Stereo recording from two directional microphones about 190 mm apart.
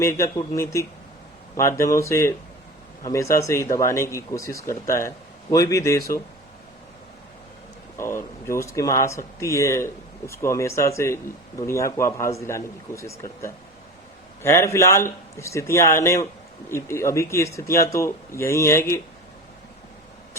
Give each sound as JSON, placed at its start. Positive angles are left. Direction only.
{"t": 0.0, "sound": "speech", "side_deg": 15}
{"t": 7.9, "sound": "speech", "side_deg": 15}
{"t": 14.4, "sound": "speech", "side_deg": 15}